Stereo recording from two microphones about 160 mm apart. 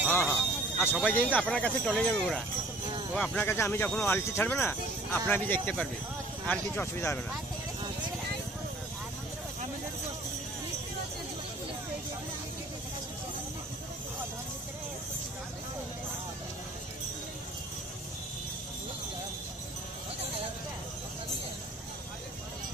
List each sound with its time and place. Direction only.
0.1 s a sound: 15° left (ahead or behind)
1.0 s speech: 10° left (ahead or behind)
3.4 s speech: 15° left (ahead or behind)